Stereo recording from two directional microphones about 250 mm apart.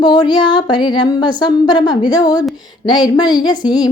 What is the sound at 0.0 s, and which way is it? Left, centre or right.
Speech, centre.